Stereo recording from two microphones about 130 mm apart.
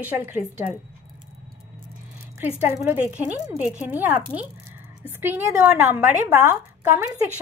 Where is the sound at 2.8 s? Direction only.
10° right (ahead or behind).